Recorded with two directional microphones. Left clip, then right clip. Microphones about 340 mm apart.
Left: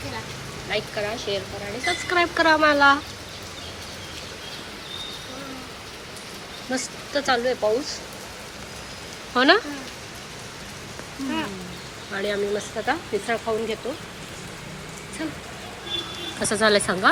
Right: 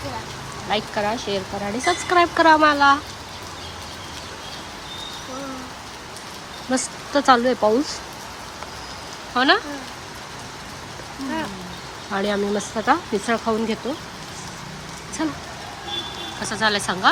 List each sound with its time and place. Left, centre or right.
0.7 s speech: centre
6.7 s speech: centre
9.3 s speech: centre
12.1 s speech: centre
16.4 s speech: centre